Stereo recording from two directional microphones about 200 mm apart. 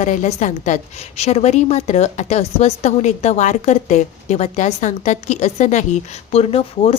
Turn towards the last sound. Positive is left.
turn(degrees=30)  # may be behind; listen again after turning